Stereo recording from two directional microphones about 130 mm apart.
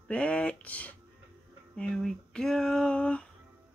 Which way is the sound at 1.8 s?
5° left (ahead or behind).